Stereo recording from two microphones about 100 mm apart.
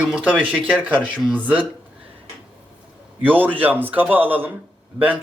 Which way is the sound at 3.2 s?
20° right (ahead or behind).